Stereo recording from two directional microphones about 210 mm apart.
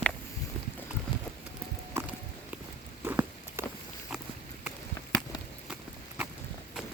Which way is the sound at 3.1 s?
10° right (ahead or behind).